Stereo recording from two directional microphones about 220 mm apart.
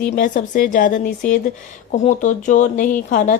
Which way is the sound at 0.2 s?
35° left (ahead or behind).